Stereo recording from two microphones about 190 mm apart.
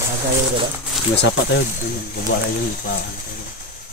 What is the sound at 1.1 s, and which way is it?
Speech, 60° left (ahead or behind).